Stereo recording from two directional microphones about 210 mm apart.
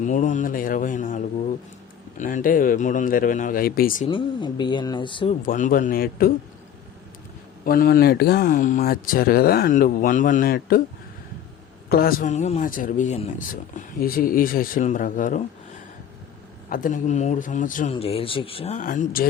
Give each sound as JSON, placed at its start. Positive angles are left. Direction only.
{"t": 0.0, "sound": "speech", "side_deg": 35}
{"t": 4.1, "sound": "speech", "side_deg": 20}
{"t": 5.4, "sound": "speech", "side_deg": 40}
{"t": 7.6, "sound": "speech", "side_deg": 45}
{"t": 11.9, "sound": "speech", "side_deg": 45}
{"t": 16.6, "sound": "speech", "side_deg": 40}
{"t": 17.9, "sound": "speech", "side_deg": 25}